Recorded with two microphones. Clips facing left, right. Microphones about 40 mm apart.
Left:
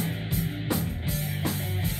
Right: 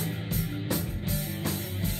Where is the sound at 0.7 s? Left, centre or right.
Left.